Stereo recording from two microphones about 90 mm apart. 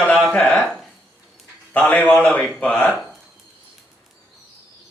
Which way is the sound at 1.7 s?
15° left (ahead or behind).